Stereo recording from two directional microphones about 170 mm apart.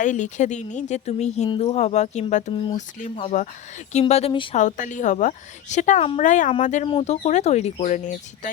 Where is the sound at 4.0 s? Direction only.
35° left (ahead or behind).